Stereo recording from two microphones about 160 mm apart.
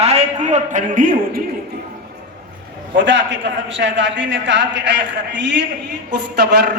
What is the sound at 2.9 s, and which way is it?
Speech, 90° right.